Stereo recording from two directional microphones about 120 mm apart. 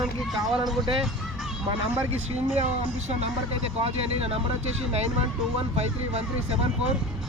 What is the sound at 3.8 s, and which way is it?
Speech, 55° right (ahead or behind).